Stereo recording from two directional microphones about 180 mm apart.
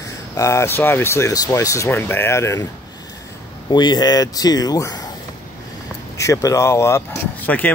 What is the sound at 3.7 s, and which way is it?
Speech, 25° left (ahead or behind).